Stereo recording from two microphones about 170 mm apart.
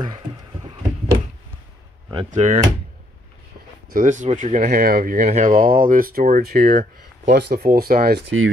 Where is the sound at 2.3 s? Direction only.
45° right (ahead or behind).